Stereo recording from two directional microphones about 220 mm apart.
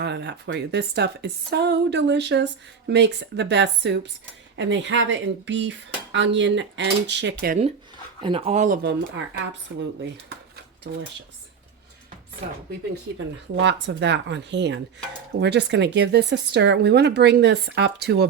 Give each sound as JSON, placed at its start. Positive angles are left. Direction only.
{"t": 0.0, "sound": "speech", "side_deg": -50}
{"t": 8.2, "sound": "speech", "side_deg": -25}
{"t": 8.8, "sound": "speech", "side_deg": -50}
{"t": 10.9, "sound": "speech", "side_deg": -55}
{"t": 12.9, "sound": "speech", "side_deg": -55}